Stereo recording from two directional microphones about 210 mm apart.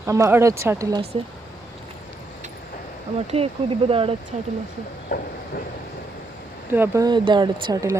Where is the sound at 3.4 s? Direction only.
30° right (ahead or behind).